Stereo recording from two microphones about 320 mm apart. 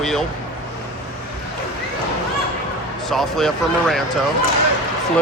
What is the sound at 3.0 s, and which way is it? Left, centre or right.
Speech, centre.